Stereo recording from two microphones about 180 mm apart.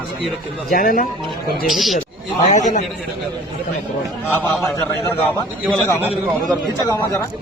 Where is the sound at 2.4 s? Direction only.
40° left (ahead or behind).